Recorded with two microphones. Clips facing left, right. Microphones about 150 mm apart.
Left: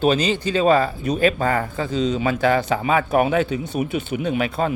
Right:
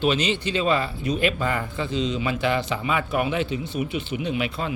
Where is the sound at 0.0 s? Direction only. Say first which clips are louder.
Left 4 dB; 40° left (ahead or behind).